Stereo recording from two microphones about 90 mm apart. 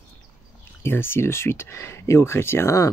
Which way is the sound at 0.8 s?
25° left (ahead or behind).